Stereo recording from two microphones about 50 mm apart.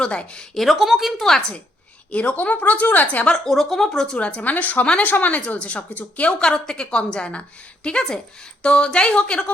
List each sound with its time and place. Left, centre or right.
0.0 s a woman's voice: centre
0.5 s speech: centre
1.2 s speech: centre
2.0 s a woman's voice: left
3.2 s speech: centre
4.2 s a woman's voice: left
6.4 s a woman's voice: centre